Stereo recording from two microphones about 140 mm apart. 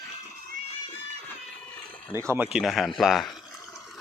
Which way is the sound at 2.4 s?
5° right (ahead or behind).